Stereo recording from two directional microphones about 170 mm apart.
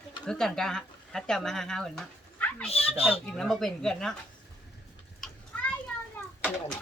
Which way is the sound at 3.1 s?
5° left (ahead or behind).